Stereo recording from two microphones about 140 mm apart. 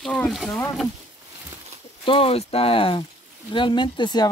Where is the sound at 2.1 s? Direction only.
40° left (ahead or behind).